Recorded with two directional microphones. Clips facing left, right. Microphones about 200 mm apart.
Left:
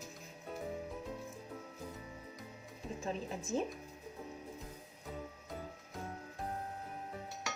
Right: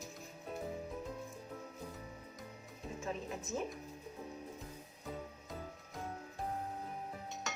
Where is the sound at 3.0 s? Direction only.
30° left (ahead or behind).